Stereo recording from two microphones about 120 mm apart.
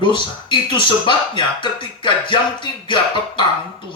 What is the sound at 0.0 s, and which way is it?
Speech, 40° left (ahead or behind).